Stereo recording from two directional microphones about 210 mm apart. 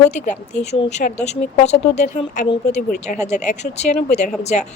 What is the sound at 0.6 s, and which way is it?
A woman's voice, 30° left (ahead or behind).